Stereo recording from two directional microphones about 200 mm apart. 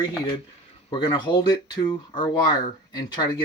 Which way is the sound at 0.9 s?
20° left (ahead or behind).